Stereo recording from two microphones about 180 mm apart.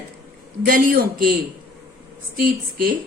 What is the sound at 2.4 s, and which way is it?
Speech, 55° right (ahead or behind).